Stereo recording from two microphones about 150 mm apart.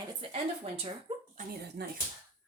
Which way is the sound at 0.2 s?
40° right (ahead or behind).